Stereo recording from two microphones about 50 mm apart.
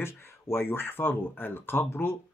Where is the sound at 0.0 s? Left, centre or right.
Left.